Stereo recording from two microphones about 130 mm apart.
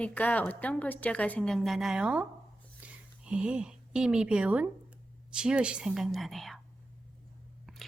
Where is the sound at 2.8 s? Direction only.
10° right (ahead or behind).